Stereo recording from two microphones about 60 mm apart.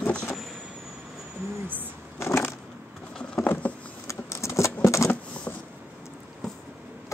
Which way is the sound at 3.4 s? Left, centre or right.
Left.